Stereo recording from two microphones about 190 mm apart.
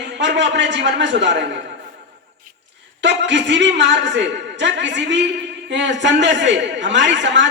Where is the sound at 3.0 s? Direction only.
70° right (ahead or behind).